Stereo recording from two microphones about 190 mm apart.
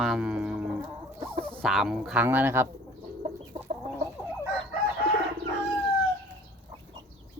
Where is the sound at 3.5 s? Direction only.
35° right (ahead or behind).